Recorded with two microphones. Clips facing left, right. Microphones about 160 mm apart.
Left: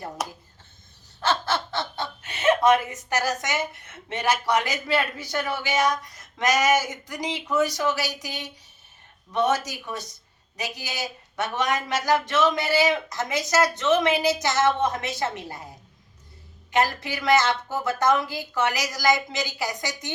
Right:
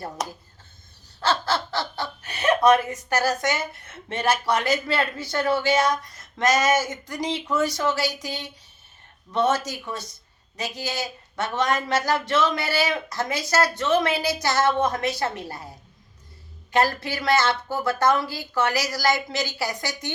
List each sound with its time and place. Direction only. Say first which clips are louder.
1.2 s snicker: right 1 dB; 20° left (ahead or behind)
3.2 s a woman's voice: right 3 dB; 15° left (ahead or behind)
16.7 s speech: right 2 dB; 15° left (ahead or behind)